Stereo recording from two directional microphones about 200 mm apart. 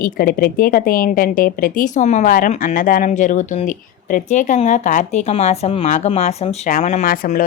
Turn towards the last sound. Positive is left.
turn(degrees=45)  # may be behind; listen again after turning